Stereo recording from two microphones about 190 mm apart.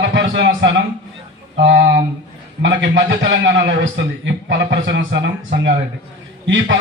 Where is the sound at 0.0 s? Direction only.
75° right (ahead or behind).